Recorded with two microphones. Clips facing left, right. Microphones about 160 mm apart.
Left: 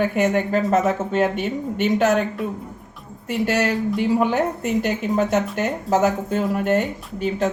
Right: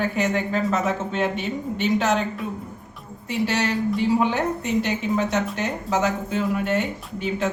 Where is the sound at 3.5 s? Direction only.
50° left (ahead or behind).